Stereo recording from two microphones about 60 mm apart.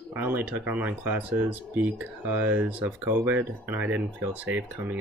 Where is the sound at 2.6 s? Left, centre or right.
Right.